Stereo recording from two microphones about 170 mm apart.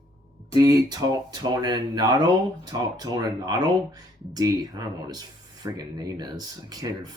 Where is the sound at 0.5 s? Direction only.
20° right (ahead or behind).